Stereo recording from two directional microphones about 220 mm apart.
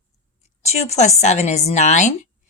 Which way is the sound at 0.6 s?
30° left (ahead or behind).